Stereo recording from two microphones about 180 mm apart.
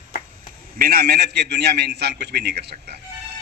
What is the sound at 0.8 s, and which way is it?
A man's voice, 55° right (ahead or behind).